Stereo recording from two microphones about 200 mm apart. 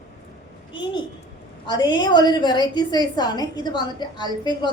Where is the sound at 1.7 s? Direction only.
20° left (ahead or behind).